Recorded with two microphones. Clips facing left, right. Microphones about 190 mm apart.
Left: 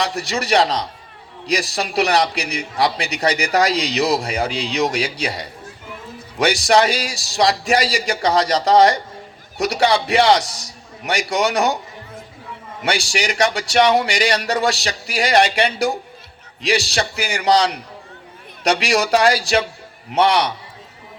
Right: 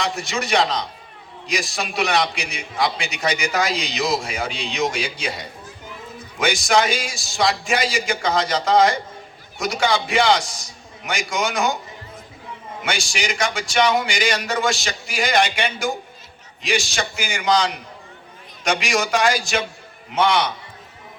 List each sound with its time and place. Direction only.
0.0 s a man's voice: 35° left (ahead or behind)
12.8 s a man's voice: 35° left (ahead or behind)